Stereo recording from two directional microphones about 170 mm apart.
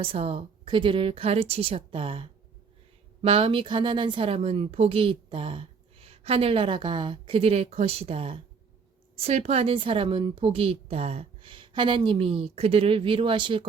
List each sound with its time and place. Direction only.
0.0 s speech: 35° right (ahead or behind)